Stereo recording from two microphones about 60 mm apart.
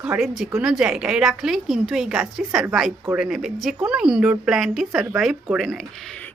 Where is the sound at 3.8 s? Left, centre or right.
Centre.